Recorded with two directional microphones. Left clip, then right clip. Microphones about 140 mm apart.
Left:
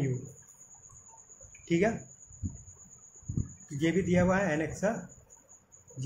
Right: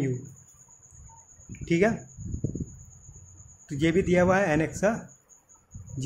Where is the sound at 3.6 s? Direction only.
55° right (ahead or behind).